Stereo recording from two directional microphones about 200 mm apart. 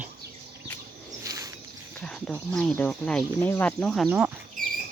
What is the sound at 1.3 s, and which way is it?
Walk, 15° right (ahead or behind).